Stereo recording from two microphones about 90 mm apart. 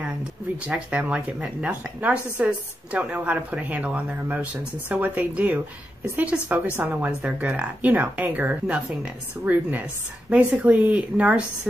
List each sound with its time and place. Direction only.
0.7 s a woman's voice: 15° right (ahead or behind)